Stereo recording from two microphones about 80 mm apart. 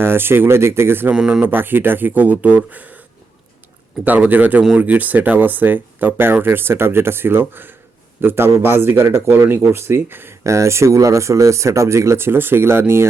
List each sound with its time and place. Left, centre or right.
0.0 s speech: right
1.1 s speech: centre
1.4 s speech: right
4.0 s speech: right